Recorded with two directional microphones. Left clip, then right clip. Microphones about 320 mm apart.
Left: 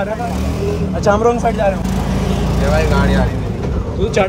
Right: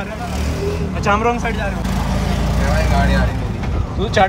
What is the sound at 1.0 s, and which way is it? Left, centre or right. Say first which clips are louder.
Speech: left 3 dB; centre.